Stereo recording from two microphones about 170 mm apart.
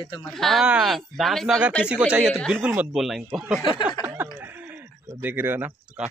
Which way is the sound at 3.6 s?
30° left (ahead or behind).